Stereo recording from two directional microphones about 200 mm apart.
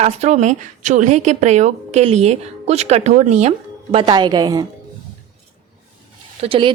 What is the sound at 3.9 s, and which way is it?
Speech, 25° right (ahead or behind).